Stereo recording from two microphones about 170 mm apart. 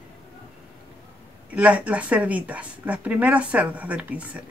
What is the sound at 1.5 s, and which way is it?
Speech, 10° right (ahead or behind).